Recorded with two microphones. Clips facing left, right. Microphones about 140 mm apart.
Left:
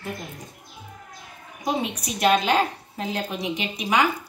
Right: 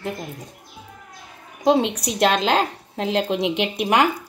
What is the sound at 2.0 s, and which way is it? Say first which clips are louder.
A woman's voice: right 2 dB; 90° right.